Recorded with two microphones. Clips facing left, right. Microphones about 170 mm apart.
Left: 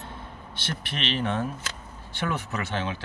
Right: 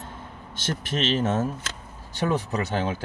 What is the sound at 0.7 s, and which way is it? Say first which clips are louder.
Speech: right 5 dB; 45° right (ahead or behind).